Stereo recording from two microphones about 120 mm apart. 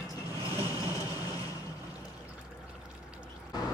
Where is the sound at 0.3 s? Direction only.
30° left (ahead or behind).